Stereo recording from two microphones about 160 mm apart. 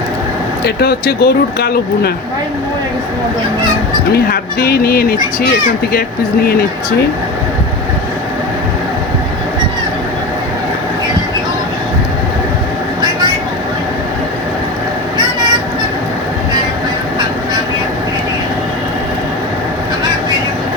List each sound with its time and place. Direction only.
0.6 s speech: 80° left
4.1 s speech: 75° left (ahead or behind)